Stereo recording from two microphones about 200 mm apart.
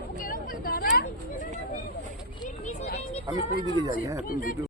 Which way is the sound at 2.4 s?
50° left (ahead or behind).